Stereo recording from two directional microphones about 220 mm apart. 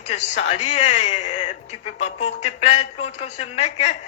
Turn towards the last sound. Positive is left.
turn(degrees=30)  # may be behind; listen again after turning